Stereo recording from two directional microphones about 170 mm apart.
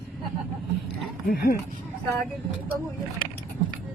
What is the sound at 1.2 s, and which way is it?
Speech, 60° left (ahead or behind).